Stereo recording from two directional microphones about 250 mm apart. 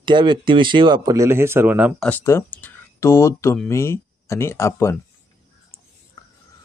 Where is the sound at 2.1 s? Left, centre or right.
Centre.